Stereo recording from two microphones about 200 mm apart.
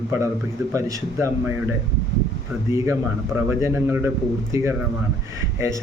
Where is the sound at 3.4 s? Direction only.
10° right (ahead or behind).